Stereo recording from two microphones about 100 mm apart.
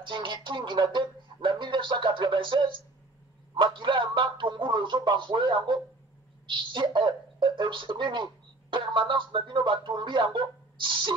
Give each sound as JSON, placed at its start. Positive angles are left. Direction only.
{"t": 0.0, "sound": "a woman's voice", "side_deg": -55}